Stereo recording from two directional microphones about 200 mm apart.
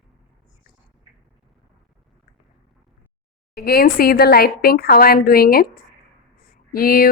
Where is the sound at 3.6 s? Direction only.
50° left (ahead or behind).